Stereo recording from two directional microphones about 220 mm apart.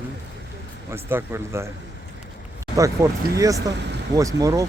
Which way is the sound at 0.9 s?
10° right (ahead or behind).